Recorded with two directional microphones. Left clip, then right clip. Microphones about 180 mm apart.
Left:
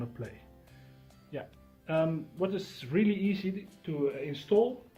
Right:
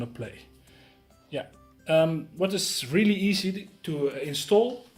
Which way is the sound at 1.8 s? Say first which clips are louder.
Right 8 dB; 60° right (ahead or behind).